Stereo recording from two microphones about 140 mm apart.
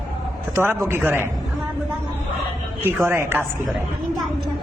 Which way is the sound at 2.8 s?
15° right (ahead or behind).